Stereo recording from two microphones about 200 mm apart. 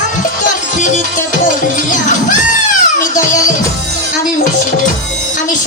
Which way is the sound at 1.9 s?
40° left (ahead or behind).